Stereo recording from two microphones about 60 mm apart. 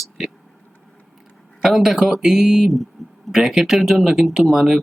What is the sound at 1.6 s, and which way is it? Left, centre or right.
Speech, centre.